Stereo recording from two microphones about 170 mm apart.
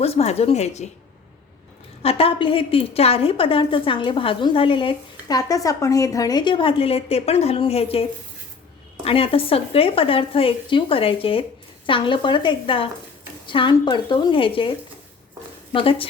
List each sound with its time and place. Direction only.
0.0 s a woman's voice: 35° left (ahead or behind)
2.0 s a woman's voice: 35° left (ahead or behind)
9.0 s a woman's voice: 35° left (ahead or behind)
15.7 s a woman's voice: 30° left (ahead or behind)